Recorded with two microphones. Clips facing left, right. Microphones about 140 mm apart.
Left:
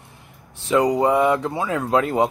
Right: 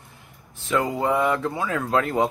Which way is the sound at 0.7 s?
15° left (ahead or behind).